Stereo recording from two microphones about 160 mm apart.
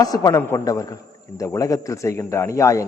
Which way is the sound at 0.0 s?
25° left (ahead or behind).